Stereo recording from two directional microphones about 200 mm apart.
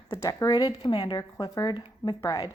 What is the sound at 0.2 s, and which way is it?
Speech, 15° left (ahead or behind).